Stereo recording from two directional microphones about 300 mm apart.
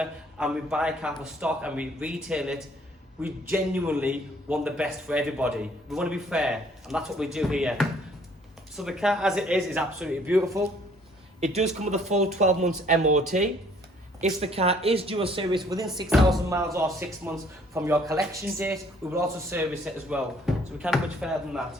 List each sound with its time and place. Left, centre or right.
0.0 s a man's voice: centre
11.3 s speech: right
16.0 s a man's voice: centre